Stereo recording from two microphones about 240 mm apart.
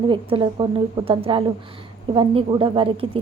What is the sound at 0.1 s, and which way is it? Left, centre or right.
A woman's voice, right.